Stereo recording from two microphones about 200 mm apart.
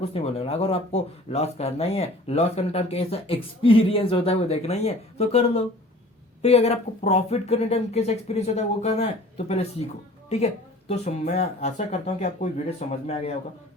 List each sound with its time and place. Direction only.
0.0 s speech: 30° left (ahead or behind)
10.2 s speech: 30° left (ahead or behind)